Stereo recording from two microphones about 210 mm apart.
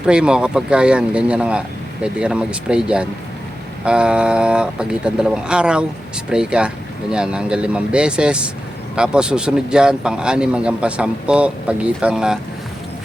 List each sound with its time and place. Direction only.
0.0 s a man's voice: 5° right (ahead or behind)